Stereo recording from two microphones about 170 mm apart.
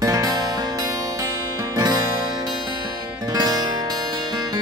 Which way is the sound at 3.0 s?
25° right (ahead or behind).